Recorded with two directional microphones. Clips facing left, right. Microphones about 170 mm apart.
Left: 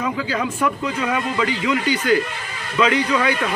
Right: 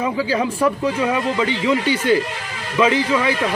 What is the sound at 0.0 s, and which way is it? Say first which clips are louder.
Speech: right 3 dB; 30° right (ahead or behind).